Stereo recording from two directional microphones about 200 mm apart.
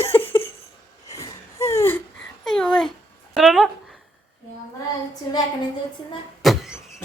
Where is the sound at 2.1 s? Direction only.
Centre (ahead or behind).